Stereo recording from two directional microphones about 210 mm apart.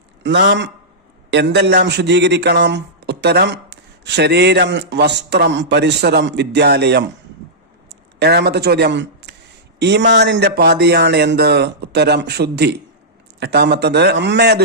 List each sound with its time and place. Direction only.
0.2 s a man's voice: 60° right (ahead or behind)